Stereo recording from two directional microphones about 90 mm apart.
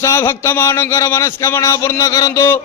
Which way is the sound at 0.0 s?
35° left (ahead or behind).